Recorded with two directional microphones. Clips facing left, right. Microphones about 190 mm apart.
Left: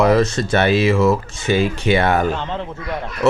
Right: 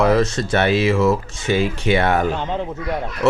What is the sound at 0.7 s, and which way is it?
Mantra, 40° left (ahead or behind).